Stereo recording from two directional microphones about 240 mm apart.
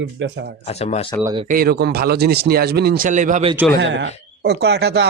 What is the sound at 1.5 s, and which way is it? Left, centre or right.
Speech, right.